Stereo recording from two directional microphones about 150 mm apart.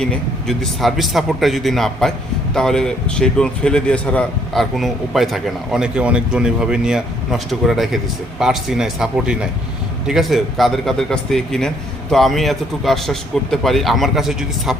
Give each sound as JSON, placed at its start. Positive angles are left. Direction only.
{"t": 0.0, "sound": "a man's voice", "side_deg": 5}